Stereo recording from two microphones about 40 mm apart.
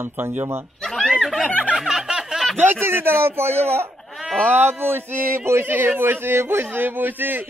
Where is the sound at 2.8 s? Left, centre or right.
Right.